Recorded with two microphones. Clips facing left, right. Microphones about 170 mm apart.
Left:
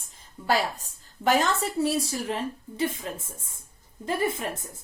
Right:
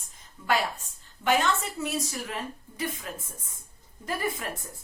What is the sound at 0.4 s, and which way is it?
A woman's voice, 35° left (ahead or behind).